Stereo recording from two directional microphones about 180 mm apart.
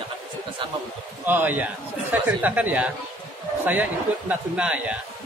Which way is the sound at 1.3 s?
10° right (ahead or behind).